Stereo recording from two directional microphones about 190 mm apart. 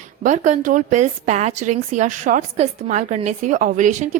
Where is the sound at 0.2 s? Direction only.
40° right (ahead or behind).